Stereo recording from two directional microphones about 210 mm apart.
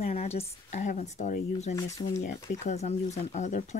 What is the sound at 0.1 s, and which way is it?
Speech, 30° left (ahead or behind).